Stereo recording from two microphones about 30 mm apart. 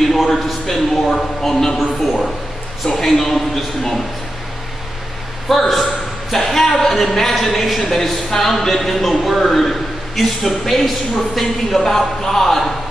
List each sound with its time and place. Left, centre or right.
0.1 s a man's voice: centre
0.7 s speech: centre
1.8 s a sound: centre
3.0 s speech: centre
5.5 s speech: centre